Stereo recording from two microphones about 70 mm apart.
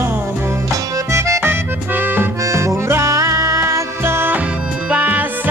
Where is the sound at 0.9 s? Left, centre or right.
Right.